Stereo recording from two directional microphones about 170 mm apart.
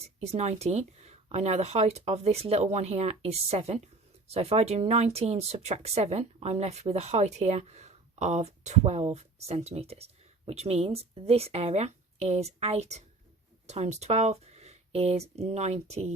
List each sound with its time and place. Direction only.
0.0 s speech: 40° right (ahead or behind)